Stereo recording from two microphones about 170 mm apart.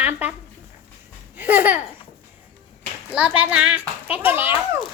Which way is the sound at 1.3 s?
10° right (ahead or behind).